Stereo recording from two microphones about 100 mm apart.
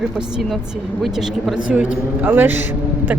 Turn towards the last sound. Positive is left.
turn(degrees=-20)  # may be behind; listen again after turning